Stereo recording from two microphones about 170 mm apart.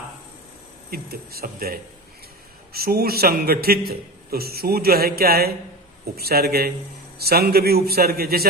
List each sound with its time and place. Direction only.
0.8 s a man's voice: 65° right (ahead or behind)